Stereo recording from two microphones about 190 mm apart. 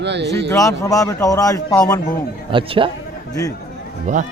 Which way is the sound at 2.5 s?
25° right (ahead or behind).